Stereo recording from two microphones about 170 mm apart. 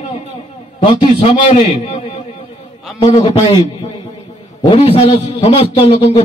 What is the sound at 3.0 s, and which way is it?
Speech, 35° left (ahead or behind).